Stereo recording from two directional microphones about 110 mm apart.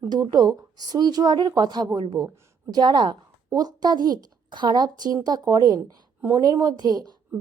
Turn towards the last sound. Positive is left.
turn(degrees=-40)  # may be behind; listen again after turning